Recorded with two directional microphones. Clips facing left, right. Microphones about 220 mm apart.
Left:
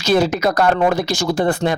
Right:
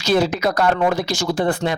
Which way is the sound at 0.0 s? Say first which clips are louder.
Left 2 dB; 45° left (ahead or behind).